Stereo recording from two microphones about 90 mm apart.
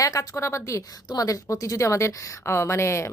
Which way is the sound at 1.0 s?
45° left (ahead or behind).